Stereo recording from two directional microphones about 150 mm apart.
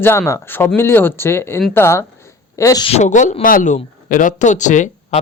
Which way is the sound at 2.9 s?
50° left (ahead or behind).